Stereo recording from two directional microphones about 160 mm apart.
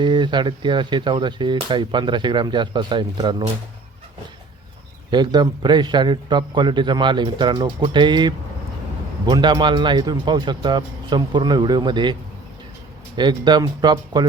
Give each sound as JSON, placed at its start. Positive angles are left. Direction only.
{"t": 0.0, "sound": "speech", "side_deg": -30}
{"t": 5.1, "sound": "speech", "side_deg": -25}
{"t": 13.1, "sound": "speech", "side_deg": -30}